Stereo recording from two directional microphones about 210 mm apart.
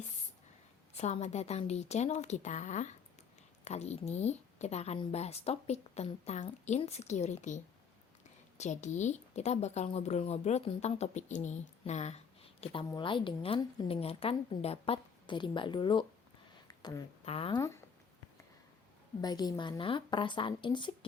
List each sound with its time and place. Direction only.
0.9 s a woman's voice: 30° left (ahead or behind)
17.6 s speech: 15° left (ahead or behind)
19.2 s a woman's voice: 20° left (ahead or behind)